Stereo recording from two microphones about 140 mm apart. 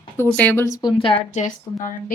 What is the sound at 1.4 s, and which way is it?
Speech, 60° left (ahead or behind).